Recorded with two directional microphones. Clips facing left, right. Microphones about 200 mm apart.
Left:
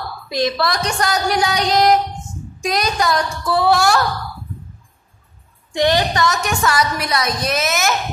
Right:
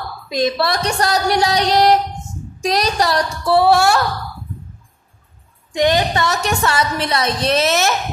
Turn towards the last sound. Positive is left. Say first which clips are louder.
# right 4 dB
turn(degrees=-30)  # may be behind; listen again after turning